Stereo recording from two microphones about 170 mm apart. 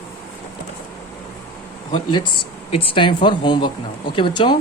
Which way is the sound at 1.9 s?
25° left (ahead or behind).